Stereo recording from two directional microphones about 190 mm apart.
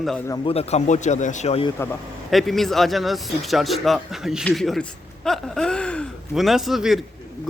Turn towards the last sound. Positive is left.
turn(degrees=0)  # may be behind; listen again after turning